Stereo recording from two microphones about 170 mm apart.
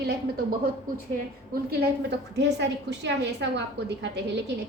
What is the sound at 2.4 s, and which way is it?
A woman's voice, 90° right.